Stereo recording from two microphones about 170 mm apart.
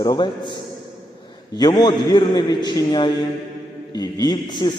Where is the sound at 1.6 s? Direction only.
25° left (ahead or behind).